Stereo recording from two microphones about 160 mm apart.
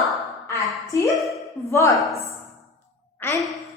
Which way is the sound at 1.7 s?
20° left (ahead or behind).